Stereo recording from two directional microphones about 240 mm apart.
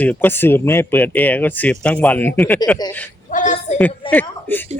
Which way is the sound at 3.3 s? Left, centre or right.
Left.